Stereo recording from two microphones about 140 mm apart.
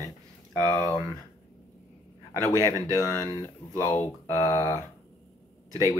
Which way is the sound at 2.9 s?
25° left (ahead or behind).